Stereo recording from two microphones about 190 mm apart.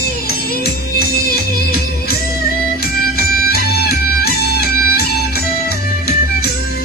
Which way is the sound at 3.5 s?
55° left (ahead or behind).